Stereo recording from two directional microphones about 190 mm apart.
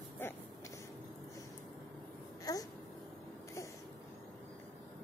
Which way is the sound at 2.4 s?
20° left (ahead or behind).